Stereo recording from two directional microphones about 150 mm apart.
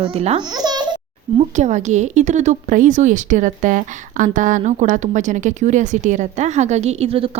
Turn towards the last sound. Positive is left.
turn(degrees=-40)  # may be behind; listen again after turning